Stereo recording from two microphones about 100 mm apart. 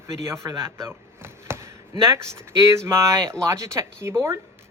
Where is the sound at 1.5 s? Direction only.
25° right (ahead or behind).